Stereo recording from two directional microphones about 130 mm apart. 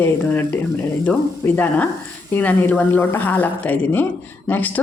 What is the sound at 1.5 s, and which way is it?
Speech, 10° left (ahead or behind).